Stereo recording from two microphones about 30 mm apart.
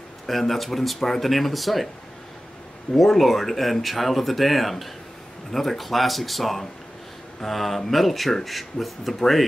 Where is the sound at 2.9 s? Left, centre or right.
Centre.